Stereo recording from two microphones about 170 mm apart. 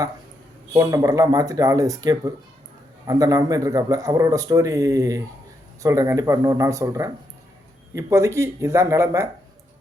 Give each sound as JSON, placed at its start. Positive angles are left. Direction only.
{"t": 0.7, "sound": "a man's voice", "side_deg": -20}